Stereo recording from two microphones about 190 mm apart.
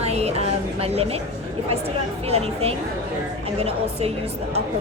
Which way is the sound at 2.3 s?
30° right (ahead or behind).